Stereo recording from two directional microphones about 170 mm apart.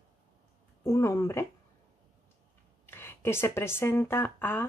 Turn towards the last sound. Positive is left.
turn(degrees=10)  # may be behind; listen again after turning